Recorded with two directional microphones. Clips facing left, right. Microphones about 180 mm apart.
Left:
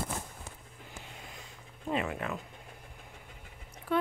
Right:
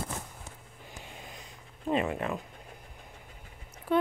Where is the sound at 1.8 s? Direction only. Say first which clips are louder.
Right 4 dB; 30° right (ahead or behind).